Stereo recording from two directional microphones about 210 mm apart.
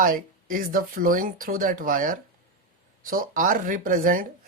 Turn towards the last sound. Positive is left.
turn(degrees=-40)  # may be behind; listen again after turning